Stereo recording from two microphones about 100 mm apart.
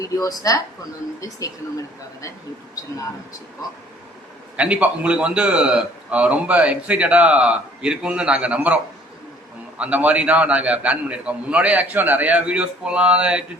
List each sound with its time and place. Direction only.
0.0 s a woman's voice: 35° left (ahead or behind)
4.5 s a man's voice: 15° right (ahead or behind)